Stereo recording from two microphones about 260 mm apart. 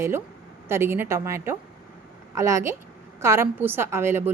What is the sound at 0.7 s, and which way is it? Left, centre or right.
A woman's voice, centre.